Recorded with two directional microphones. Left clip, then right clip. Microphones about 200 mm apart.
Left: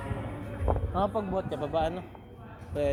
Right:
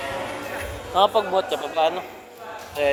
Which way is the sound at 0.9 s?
15° left (ahead or behind).